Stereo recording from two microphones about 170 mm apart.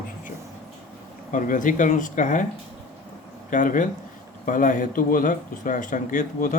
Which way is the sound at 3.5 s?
50° left (ahead or behind).